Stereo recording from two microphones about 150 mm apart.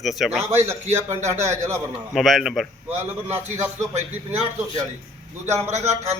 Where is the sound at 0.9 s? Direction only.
15° right (ahead or behind).